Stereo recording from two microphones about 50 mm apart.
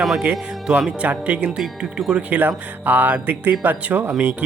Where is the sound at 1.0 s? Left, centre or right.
Right.